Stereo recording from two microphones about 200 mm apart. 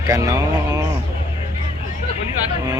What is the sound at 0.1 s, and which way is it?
Speech, 15° right (ahead or behind).